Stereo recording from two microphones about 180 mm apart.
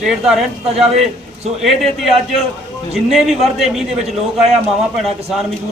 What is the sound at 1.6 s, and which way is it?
A man's voice, centre (ahead or behind).